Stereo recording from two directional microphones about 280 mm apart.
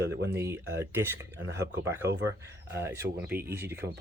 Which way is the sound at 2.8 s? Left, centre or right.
Centre.